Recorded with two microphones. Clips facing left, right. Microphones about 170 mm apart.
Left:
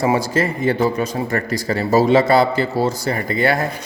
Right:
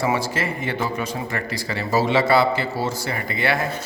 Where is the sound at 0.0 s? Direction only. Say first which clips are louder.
Left 5 dB; 40° left (ahead or behind).